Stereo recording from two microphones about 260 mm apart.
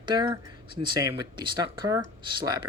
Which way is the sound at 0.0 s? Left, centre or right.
Centre.